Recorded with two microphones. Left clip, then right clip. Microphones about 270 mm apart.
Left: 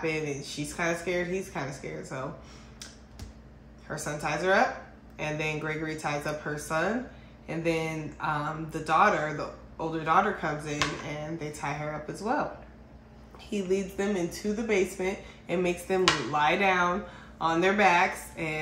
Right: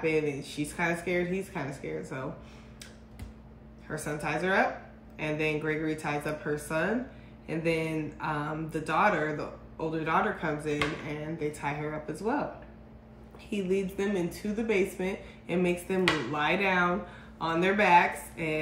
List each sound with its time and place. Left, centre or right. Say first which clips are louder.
0.0 s speech: right 2 dB; centre
3.9 s speech: left 1 dB; centre
13.5 s speech: left 1 dB; centre